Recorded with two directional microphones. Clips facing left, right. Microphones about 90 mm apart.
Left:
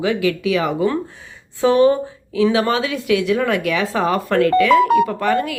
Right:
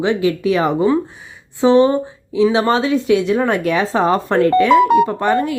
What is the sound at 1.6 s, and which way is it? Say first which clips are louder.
A woman's voice: right 2 dB; 25° right (ahead or behind).